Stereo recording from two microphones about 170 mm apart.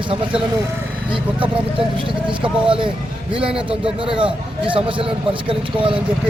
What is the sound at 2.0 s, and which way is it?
A man's voice, 30° right (ahead or behind).